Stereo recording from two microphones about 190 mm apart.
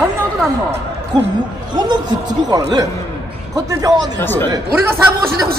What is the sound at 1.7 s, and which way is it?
Speech, 20° right (ahead or behind).